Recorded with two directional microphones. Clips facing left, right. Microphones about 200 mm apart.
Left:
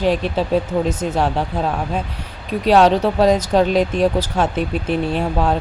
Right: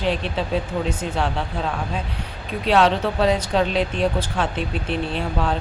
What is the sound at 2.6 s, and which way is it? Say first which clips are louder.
Speech: left 5 dB; 40° left (ahead or behind).